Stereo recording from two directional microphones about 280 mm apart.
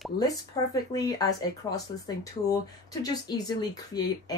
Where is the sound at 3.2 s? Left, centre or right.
Centre.